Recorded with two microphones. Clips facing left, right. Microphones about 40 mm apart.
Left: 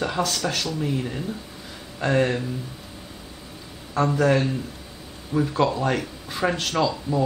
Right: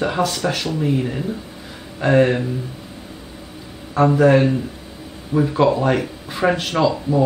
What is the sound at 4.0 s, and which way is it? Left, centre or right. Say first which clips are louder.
A man's voice: right 7 dB; centre.